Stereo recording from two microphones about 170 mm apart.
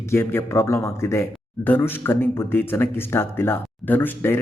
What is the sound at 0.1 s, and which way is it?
Speech, 15° left (ahead or behind).